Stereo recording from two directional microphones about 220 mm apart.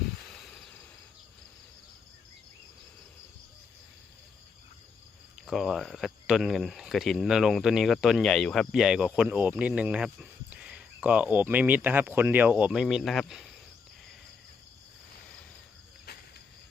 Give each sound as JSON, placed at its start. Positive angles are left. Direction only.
{"t": 5.5, "sound": "speech", "side_deg": 0}
{"t": 16.1, "sound": "cricket", "side_deg": 45}